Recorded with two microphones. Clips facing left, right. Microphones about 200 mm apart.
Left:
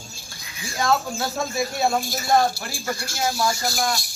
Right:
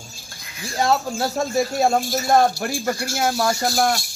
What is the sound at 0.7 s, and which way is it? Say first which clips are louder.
Speech: right 2 dB; 35° right (ahead or behind).